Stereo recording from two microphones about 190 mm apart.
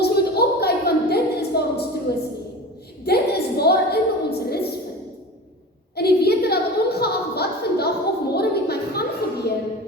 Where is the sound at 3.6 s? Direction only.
55° left (ahead or behind).